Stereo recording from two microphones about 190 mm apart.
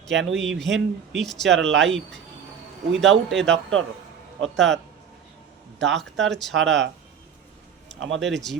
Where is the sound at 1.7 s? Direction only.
70° right (ahead or behind).